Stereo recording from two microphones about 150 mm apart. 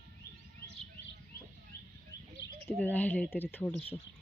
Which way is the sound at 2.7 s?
10° left (ahead or behind).